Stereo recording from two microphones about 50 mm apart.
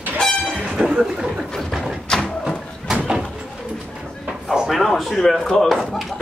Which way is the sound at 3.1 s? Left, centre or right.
Centre.